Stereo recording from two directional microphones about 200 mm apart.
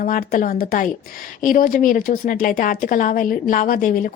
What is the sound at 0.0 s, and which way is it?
A woman's voice, 45° left (ahead or behind).